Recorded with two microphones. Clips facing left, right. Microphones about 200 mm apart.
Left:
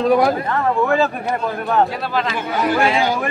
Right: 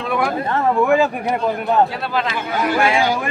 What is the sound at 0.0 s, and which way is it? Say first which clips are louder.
Speech: left 6 dB; 35° left (ahead or behind).